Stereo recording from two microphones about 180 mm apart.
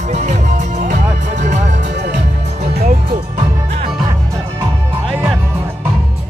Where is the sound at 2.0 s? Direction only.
70° right (ahead or behind).